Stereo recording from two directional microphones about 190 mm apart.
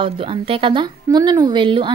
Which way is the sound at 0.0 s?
30° right (ahead or behind).